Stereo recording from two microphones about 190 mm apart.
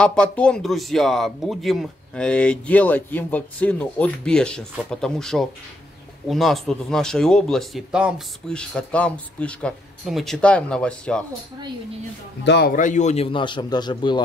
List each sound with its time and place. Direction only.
0.0 s speech: 5° left (ahead or behind)
12.4 s speech: 60° left (ahead or behind)
12.7 s a man's voice: 40° left (ahead or behind); by 14.2 s 25° left (ahead or behind)